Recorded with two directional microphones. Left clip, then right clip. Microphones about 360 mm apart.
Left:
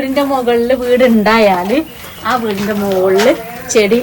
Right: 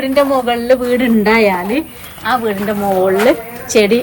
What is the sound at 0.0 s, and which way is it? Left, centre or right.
A man's voice, centre.